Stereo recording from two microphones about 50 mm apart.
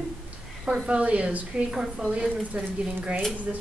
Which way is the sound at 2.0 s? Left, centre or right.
Right.